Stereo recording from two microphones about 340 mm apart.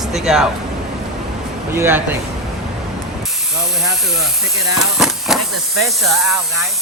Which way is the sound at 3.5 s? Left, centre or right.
Centre.